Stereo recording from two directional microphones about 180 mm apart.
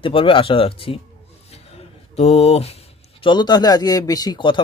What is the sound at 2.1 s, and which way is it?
Speech, 35° left (ahead or behind).